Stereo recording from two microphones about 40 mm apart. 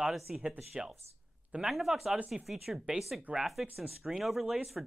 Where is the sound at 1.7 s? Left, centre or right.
Centre.